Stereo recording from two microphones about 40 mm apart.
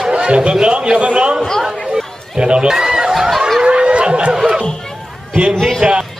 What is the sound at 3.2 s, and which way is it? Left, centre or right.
Snicker, centre.